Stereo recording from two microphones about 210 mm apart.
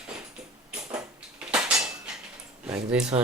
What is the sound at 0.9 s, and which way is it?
Dishes, 5° right (ahead or behind).